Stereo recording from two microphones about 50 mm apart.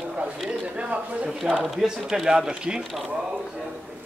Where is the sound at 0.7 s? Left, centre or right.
Right.